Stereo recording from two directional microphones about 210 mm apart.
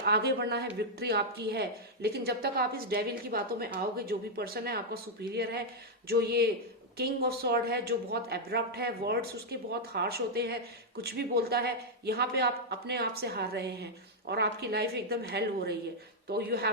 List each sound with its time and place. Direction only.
0.0 s speech: 50° right (ahead or behind)